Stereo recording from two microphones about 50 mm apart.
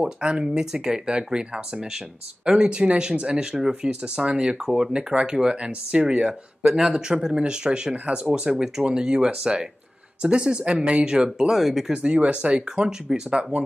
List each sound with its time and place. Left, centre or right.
0.0 s speech: centre
11.9 s speech: right